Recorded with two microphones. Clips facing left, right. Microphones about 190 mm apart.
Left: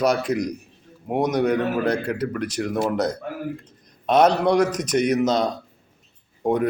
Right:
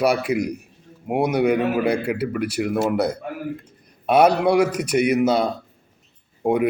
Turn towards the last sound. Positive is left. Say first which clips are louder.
# right 1 dB
turn(degrees=-10)  # may be behind; listen again after turning